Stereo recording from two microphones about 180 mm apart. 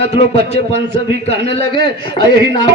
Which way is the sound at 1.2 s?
30° left (ahead or behind).